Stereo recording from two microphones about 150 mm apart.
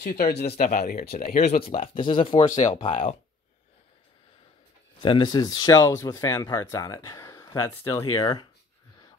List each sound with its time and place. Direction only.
0.1 s speech: 90° left
0.6 s speech: 70° left (ahead or behind)
1.1 s speech: 55° left (ahead or behind)
1.5 s speech: 40° left (ahead or behind)
2.7 s speech: 40° left (ahead or behind)
5.0 s speech: 30° left (ahead or behind)